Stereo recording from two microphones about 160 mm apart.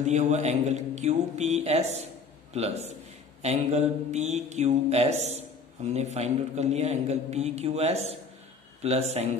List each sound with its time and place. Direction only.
0.0 s a man's voice: 45° right (ahead or behind)